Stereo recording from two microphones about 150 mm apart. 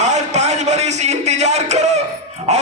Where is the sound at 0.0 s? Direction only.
50° right (ahead or behind).